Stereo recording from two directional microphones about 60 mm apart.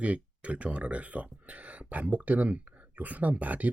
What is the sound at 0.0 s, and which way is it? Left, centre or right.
Speech, right.